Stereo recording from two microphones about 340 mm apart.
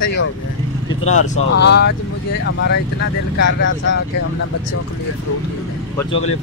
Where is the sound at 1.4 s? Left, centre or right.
Left.